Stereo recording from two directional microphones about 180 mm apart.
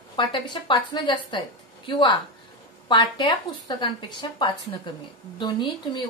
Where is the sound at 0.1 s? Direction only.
25° left (ahead or behind).